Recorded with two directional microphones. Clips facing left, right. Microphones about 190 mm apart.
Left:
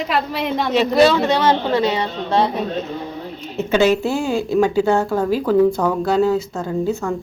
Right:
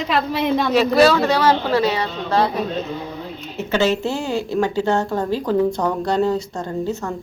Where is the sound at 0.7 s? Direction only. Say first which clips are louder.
Left 1 dB; 20° left (ahead or behind).